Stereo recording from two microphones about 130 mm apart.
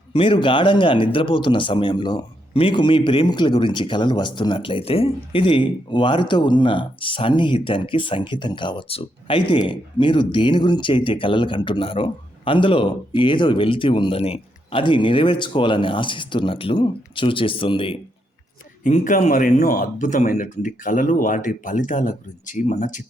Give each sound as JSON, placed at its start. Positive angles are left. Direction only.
{"t": 0.1, "sound": "speech", "side_deg": 40}
{"t": 18.8, "sound": "speech", "side_deg": 75}